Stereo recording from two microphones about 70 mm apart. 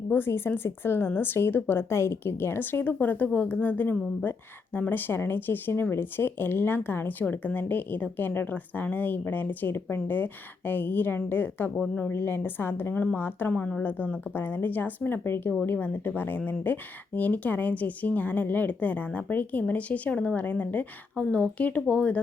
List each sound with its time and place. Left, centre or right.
0.1 s speech: left
2.8 s speech: left
13.5 s a woman's voice: centre